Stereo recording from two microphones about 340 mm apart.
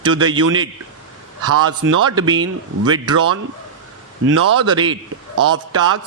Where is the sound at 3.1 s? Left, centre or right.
Right.